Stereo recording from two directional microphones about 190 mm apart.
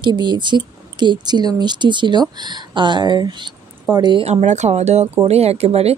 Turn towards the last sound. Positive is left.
turn(degrees=-35)  # may be behind; listen again after turning